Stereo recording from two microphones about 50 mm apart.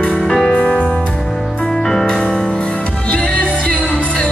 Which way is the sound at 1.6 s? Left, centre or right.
Centre.